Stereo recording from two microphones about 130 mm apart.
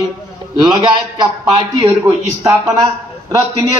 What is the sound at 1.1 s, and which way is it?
Speech, 30° right (ahead or behind).